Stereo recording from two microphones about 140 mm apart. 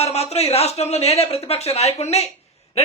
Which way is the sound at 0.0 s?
50° left (ahead or behind).